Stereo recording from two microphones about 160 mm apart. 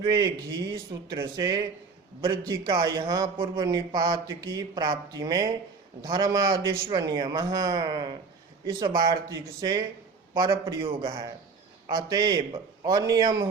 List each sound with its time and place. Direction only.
0.0 s a man's voice: 25° right (ahead or behind)